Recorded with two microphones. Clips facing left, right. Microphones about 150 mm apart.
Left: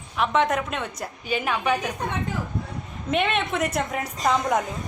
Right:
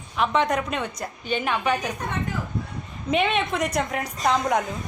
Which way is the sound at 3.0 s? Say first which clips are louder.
Right 1 dB; centre (ahead or behind).